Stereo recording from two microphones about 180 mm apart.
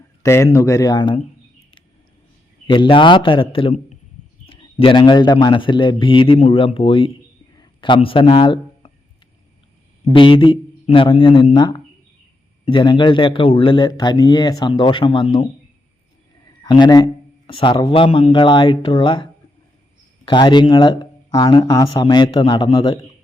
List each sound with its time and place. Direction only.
0.2 s a man's voice: 15° left (ahead or behind)
2.6 s a man's voice: 25° left (ahead or behind)
10.1 s a man's voice: 30° left (ahead or behind)
16.6 s a man's voice: 25° left (ahead or behind)